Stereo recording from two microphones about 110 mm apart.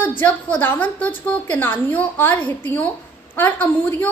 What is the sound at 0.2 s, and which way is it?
A woman's voice, 20° left (ahead or behind).